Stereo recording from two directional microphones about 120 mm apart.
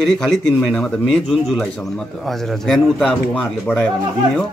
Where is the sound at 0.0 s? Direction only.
5° left (ahead or behind).